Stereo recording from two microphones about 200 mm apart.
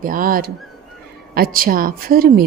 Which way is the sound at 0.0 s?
45° right (ahead or behind).